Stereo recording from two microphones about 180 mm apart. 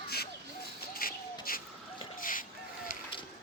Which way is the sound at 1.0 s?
55° left (ahead or behind).